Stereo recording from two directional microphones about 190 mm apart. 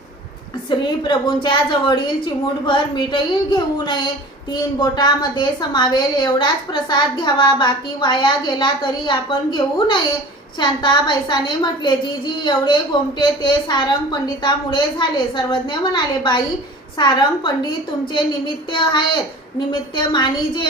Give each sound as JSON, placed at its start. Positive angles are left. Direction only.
{"t": 0.7, "sound": "a woman's voice", "side_deg": 25}
{"t": 18.7, "sound": "a woman's voice", "side_deg": 25}